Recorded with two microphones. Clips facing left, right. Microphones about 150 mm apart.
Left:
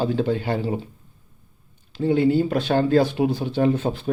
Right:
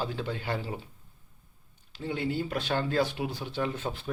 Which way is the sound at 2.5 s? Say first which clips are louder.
Left 11 dB; 35° left (ahead or behind).